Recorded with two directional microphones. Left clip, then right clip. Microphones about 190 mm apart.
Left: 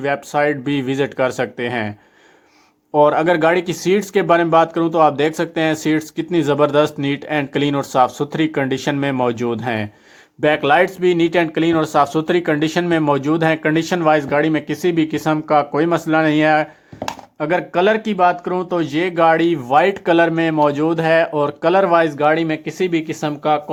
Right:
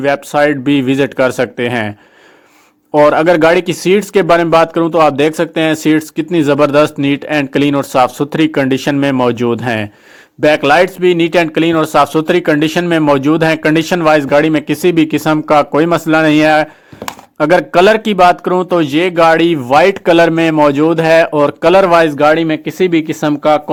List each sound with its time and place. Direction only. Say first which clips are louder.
0.0 s speech: right 6 dB; 25° right (ahead or behind)
2.9 s speech: right 5 dB; 30° right (ahead or behind)
17.1 s speech: right 9 dB; 40° right (ahead or behind)